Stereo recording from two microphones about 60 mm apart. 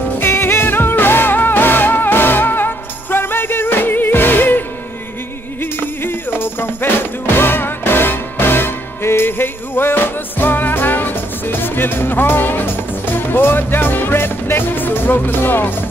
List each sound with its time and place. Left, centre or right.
0.2 s music: left